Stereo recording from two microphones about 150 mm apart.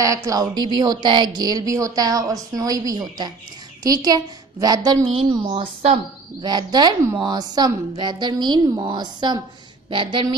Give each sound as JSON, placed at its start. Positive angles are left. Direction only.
{"t": 0.0, "sound": "speech", "side_deg": -20}
{"t": 5.3, "sound": "a woman's voice", "side_deg": -35}